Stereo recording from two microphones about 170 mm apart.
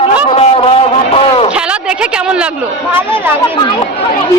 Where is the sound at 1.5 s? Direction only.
5° right (ahead or behind).